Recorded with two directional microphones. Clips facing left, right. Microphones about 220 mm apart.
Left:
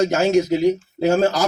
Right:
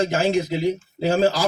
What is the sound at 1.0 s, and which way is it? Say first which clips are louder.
Speech: left 2 dB; 45° left (ahead or behind).